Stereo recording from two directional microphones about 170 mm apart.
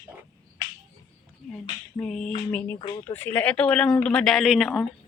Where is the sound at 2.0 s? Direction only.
5° left (ahead or behind).